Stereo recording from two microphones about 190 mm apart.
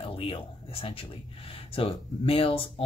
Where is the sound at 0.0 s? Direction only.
30° left (ahead or behind).